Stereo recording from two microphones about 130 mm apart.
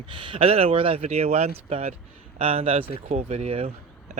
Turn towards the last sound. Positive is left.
turn(degrees=-55)  # may be behind; listen again after turning